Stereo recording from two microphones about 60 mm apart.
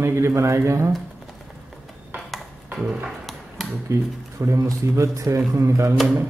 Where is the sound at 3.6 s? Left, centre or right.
Centre.